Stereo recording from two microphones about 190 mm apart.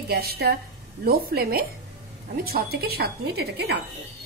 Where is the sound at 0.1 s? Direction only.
55° right (ahead or behind).